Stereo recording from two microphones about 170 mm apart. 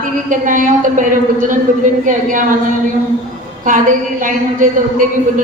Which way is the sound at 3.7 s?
50° right (ahead or behind).